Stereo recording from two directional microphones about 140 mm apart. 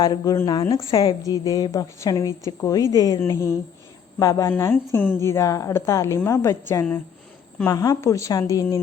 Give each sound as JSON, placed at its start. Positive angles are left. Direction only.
{"t": 0.0, "sound": "a woman's voice", "side_deg": 30}